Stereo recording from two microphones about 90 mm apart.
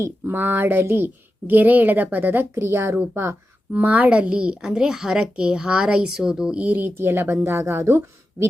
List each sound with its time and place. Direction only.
0.0 s speech: 25° right (ahead or behind)
3.2 s a sound: 30° right (ahead or behind)
3.8 s a child's voice: 15° right (ahead or behind)